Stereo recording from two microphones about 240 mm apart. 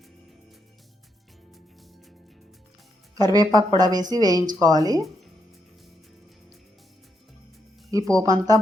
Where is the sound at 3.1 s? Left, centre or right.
Centre.